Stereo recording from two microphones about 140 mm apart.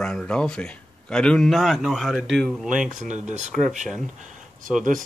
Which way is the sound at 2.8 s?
60° right (ahead or behind).